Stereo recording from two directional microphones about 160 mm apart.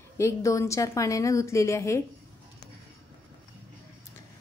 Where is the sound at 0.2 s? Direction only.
20° left (ahead or behind).